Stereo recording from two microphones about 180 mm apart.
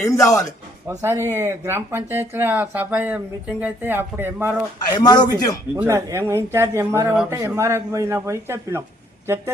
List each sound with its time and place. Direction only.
0.0 s a man's voice: 15° left (ahead or behind)
0.9 s speech: 15° right (ahead or behind)
4.9 s speech: 25° left (ahead or behind)
5.8 s speech: 15° right (ahead or behind)